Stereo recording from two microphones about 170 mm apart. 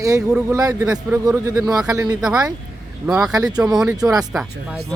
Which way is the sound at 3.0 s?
5° right (ahead or behind).